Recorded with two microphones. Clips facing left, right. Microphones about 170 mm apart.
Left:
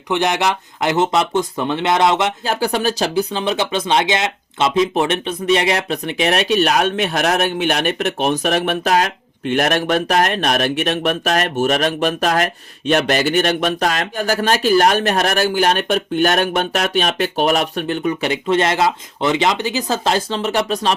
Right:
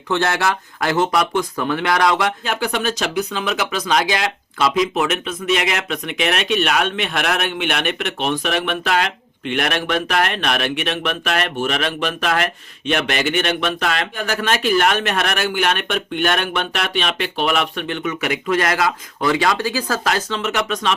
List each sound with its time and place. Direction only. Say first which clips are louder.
0.1 s speech: left 2 dB; 15° left (ahead or behind)
2.4 s speech: left 3 dB; 35° left (ahead or behind)